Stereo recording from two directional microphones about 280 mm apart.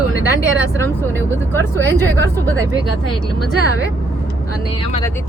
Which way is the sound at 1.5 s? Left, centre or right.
Centre.